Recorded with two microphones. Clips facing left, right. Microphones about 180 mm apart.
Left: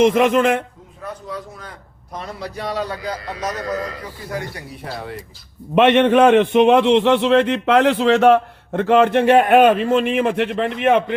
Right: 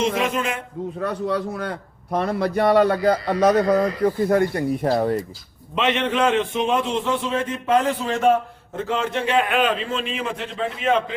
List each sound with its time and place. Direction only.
0.0 s a man's voice: 55° left (ahead or behind)
1.0 s a man's voice: 70° right (ahead or behind); by 5.2 s 40° right (ahead or behind)
5.7 s a man's voice: 55° left (ahead or behind)